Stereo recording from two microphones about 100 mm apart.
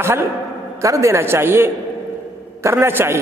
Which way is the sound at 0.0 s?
25° right (ahead or behind).